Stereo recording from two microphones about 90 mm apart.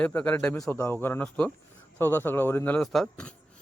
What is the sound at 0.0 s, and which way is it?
Speech, 15° left (ahead or behind).